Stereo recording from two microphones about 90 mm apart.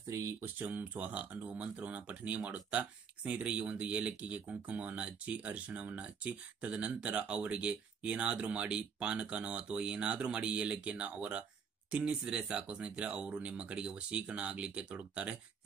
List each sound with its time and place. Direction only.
0.1 s speech: 35° right (ahead or behind)
0.6 s speech: 20° right (ahead or behind)